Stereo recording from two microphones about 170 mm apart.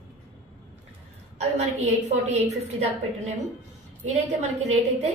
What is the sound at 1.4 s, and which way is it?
A woman's voice, 40° right (ahead or behind).